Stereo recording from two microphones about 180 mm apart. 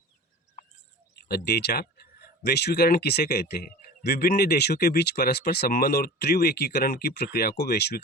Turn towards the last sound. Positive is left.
turn(degrees=60)  # may be behind; listen again after turning